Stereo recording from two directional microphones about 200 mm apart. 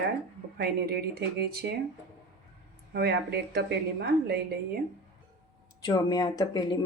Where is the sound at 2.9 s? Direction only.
55° right (ahead or behind).